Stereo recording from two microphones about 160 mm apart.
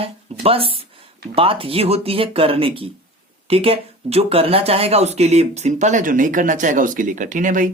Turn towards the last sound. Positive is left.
turn(degrees=-55)  # may be behind; listen again after turning